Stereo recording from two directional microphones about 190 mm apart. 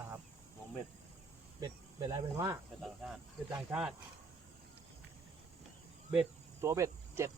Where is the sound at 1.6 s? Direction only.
20° right (ahead or behind).